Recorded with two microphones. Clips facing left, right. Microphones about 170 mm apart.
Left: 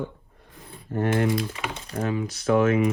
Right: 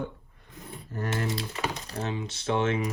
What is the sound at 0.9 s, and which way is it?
Speech, 55° left (ahead or behind).